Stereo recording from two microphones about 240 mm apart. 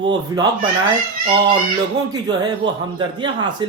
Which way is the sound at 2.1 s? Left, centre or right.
Centre.